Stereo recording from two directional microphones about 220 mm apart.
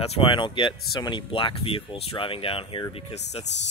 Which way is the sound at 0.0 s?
25° left (ahead or behind).